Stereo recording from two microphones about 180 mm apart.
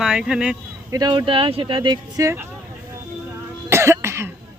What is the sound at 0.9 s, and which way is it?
Speech, 25° right (ahead or behind).